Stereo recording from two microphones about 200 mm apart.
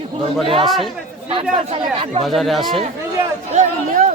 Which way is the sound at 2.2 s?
Centre (ahead or behind).